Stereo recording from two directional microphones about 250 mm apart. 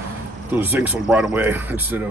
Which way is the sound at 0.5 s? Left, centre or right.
Centre.